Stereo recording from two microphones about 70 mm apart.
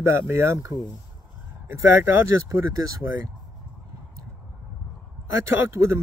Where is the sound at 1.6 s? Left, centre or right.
Right.